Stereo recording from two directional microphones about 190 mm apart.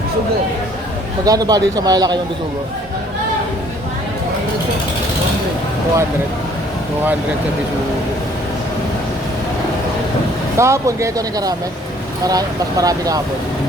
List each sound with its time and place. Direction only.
1.2 s speech: 20° right (ahead or behind)
10.6 s speech: 15° right (ahead or behind)